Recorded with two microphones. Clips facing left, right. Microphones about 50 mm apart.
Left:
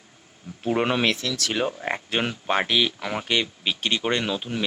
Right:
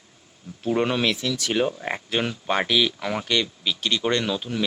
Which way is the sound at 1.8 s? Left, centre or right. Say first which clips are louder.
Even; centre.